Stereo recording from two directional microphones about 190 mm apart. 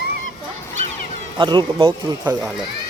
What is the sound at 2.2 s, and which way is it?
Speech, 10° right (ahead or behind).